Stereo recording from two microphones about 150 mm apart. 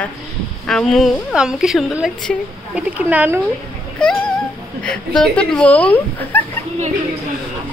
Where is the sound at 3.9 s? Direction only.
5° left (ahead or behind).